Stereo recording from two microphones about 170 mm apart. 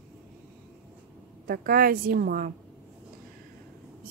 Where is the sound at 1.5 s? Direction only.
60° right (ahead or behind).